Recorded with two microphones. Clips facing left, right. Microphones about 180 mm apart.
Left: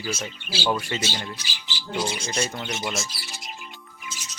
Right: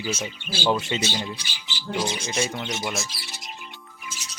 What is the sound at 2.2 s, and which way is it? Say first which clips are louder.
Speech: right 1 dB; centre (ahead or behind).